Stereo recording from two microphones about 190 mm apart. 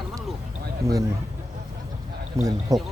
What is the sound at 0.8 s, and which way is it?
Speech, 15° right (ahead or behind).